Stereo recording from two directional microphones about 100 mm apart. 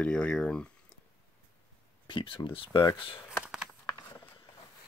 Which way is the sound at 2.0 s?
55° left (ahead or behind).